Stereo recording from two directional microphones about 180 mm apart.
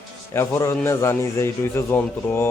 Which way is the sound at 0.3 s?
15° left (ahead or behind).